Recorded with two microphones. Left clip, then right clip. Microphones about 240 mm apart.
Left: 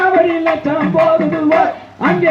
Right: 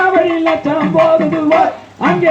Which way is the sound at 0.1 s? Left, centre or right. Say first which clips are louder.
Even; right.